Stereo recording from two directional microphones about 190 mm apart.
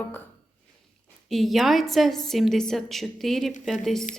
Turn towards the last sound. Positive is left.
turn(degrees=0)  # may be behind; listen again after turning